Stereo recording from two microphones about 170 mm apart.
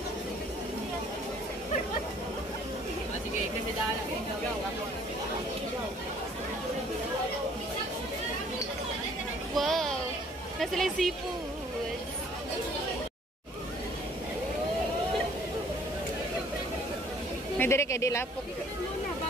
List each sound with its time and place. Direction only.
9.6 s children playing: centre (ahead or behind)
10.6 s speech: centre (ahead or behind)
17.6 s speech: 15° left (ahead or behind)